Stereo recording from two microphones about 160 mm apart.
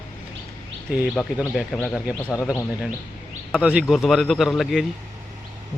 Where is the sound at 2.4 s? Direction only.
20° left (ahead or behind).